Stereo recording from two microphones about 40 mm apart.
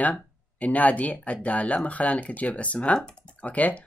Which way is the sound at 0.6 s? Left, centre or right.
Left.